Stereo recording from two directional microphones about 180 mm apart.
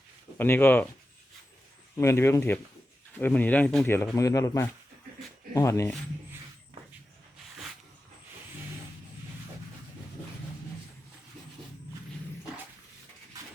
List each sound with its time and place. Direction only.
0.3 s speech: 10° left (ahead or behind)
2.0 s speech: 15° left (ahead or behind)